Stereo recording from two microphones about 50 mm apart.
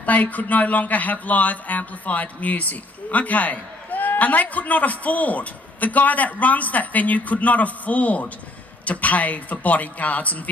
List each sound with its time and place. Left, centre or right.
0.0 s speech: left